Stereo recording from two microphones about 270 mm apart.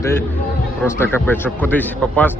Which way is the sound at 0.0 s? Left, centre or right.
Centre.